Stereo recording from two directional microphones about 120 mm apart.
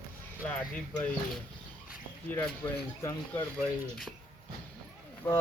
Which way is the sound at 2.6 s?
15° left (ahead or behind).